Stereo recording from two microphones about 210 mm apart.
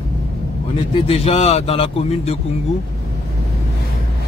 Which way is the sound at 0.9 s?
30° left (ahead or behind).